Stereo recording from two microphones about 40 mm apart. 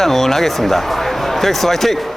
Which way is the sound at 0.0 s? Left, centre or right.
Centre.